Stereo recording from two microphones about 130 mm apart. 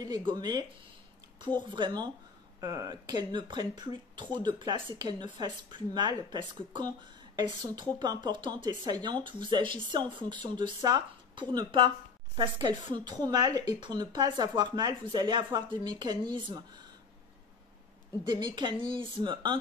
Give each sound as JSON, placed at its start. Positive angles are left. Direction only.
{"t": 0.0, "sound": "a woman's voice", "side_deg": -35}
{"t": 1.7, "sound": "a woman's voice", "side_deg": -35}
{"t": 18.2, "sound": "a woman's voice", "side_deg": -35}